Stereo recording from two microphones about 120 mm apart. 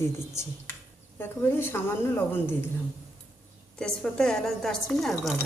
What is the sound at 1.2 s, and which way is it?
A woman's voice, 20° left (ahead or behind).